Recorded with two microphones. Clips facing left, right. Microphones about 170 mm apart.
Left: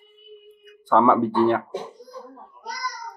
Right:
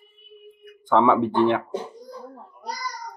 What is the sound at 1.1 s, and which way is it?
Speech, 15° right (ahead or behind).